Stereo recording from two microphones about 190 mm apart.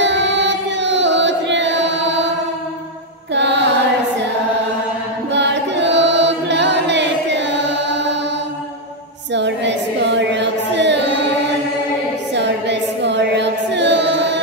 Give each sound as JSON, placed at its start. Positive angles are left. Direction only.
{"t": 0.0, "sound": "chant", "side_deg": -70}
{"t": 3.3, "sound": "mantra", "side_deg": -65}
{"t": 5.3, "sound": "music", "side_deg": -65}
{"t": 9.3, "sound": "a sound", "side_deg": -70}
{"t": 12.4, "sound": "music", "side_deg": -65}